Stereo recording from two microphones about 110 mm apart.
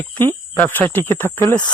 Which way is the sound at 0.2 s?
15° left (ahead or behind).